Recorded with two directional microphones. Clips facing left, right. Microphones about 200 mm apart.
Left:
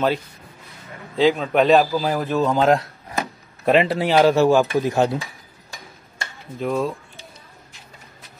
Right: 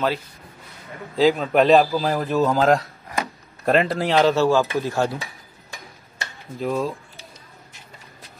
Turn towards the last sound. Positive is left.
turn(degrees=0)  # may be behind; listen again after turning